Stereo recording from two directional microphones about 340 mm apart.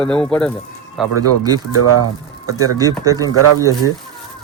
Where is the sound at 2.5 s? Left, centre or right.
Centre.